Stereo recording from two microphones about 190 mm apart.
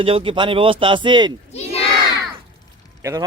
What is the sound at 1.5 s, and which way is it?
Crowd, 30° left (ahead or behind).